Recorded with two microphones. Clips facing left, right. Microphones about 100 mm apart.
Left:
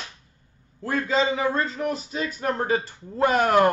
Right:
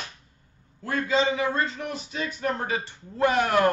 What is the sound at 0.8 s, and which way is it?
A man's voice, 35° left (ahead or behind).